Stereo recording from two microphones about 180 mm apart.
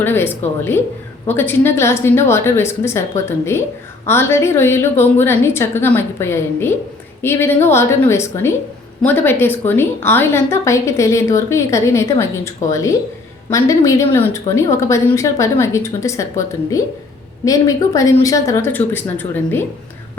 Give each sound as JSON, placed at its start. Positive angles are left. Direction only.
{"t": 0.0, "sound": "a woman's voice", "side_deg": 10}
{"t": 17.4, "sound": "a woman's voice", "side_deg": 20}